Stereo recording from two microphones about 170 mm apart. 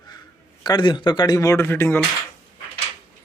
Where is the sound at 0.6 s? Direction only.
25° left (ahead or behind).